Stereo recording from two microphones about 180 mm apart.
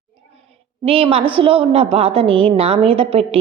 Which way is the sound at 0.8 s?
30° right (ahead or behind).